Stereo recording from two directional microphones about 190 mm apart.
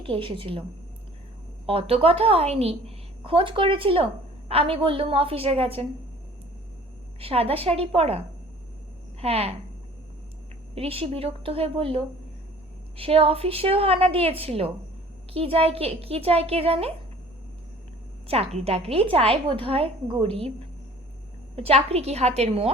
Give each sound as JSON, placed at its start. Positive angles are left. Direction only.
{"t": 0.0, "sound": "a woman's voice", "side_deg": -30}
{"t": 1.6, "sound": "a woman's voice", "side_deg": -30}
{"t": 7.2, "sound": "a woman's voice", "side_deg": -30}
{"t": 9.2, "sound": "a woman's voice", "side_deg": -30}
{"t": 10.8, "sound": "a woman's voice", "side_deg": -30}
{"t": 18.3, "sound": "a woman's voice", "side_deg": -35}
{"t": 21.5, "sound": "a woman's voice", "side_deg": -30}